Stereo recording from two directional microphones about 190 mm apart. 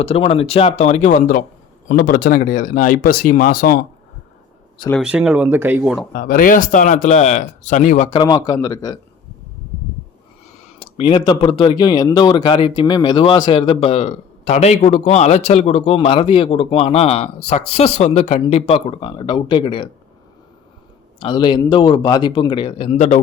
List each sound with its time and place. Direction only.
0.0 s speech: 30° left (ahead or behind); by 3.8 s 50° left (ahead or behind)
5.0 s speech: 5° right (ahead or behind)
6.1 s speech: 45° left (ahead or behind)
8.1 s speech: 20° left (ahead or behind)
10.6 s a sound: 30° left (ahead or behind)
11.3 s speech: 25° left (ahead or behind)
21.2 s speech: 25° left (ahead or behind)